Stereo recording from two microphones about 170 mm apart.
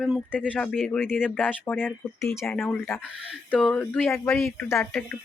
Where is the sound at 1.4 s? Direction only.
10° left (ahead or behind).